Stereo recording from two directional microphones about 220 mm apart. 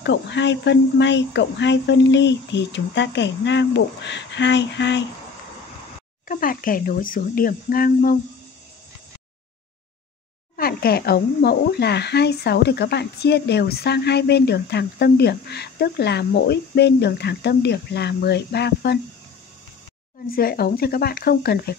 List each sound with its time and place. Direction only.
0.0 s speech: 55° left (ahead or behind)
6.2 s speech: 40° left (ahead or behind)
10.5 s speech: 45° left (ahead or behind)
20.3 s speech: 45° left (ahead or behind)